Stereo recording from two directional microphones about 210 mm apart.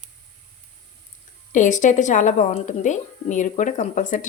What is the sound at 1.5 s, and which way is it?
A woman's voice, 35° left (ahead or behind).